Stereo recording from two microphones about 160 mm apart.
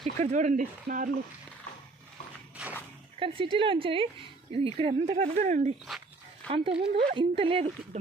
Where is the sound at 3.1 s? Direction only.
35° right (ahead or behind).